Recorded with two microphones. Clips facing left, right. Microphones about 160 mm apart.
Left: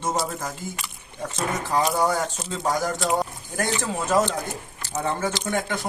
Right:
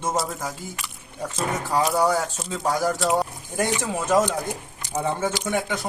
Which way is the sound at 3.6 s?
15° right (ahead or behind).